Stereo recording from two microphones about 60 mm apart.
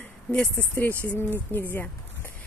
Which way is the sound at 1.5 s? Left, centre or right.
Left.